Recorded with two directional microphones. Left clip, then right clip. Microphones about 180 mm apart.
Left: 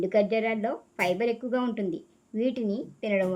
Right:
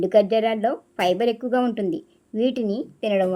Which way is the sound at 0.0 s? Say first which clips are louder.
Right 7 dB; 30° right (ahead or behind).